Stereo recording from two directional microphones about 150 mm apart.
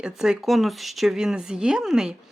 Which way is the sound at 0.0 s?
5° right (ahead or behind).